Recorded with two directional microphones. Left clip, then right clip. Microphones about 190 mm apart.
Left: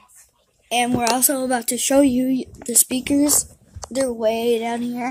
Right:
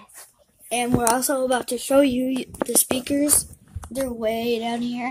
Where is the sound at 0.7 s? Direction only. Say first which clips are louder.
Left 2 dB; 50° left (ahead or behind).